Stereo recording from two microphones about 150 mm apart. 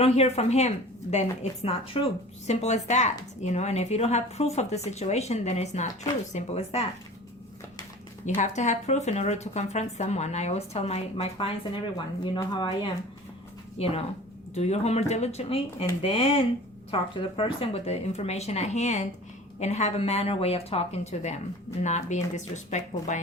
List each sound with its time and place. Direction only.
0.0 s a woman's voice: 45° left (ahead or behind)
8.4 s a woman's voice: 50° left (ahead or behind)
12.2 s speech: 30° left (ahead or behind)
13.7 s a woman's voice: 40° left (ahead or behind)